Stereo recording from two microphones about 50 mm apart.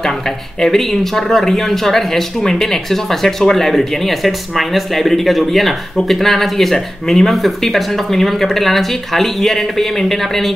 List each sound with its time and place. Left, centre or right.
0.6 s speech: centre